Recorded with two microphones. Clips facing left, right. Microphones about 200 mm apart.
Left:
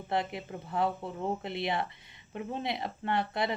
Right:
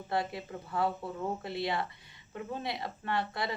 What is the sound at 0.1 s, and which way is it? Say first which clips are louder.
Speech: left 1 dB; 20° left (ahead or behind).